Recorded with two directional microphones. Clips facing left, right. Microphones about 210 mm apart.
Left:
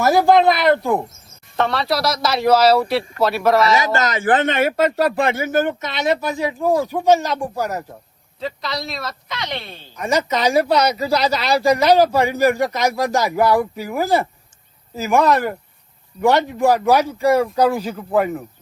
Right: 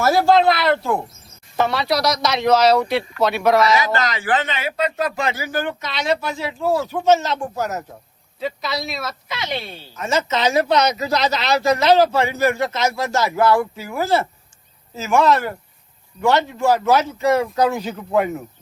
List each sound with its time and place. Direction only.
0.0 s speech: 15° left (ahead or behind)
1.5 s speech: centre (ahead or behind)
3.9 s speech: 45° left (ahead or behind)
5.4 s speech: 25° left (ahead or behind)
8.4 s speech: 5° right (ahead or behind)
9.9 s speech: 15° left (ahead or behind); by 18.4 s centre (ahead or behind)